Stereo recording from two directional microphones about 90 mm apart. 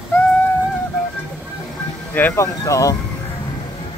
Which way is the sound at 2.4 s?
35° left (ahead or behind).